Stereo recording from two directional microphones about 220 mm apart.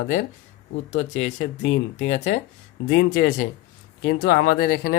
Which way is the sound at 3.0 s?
55° left (ahead or behind).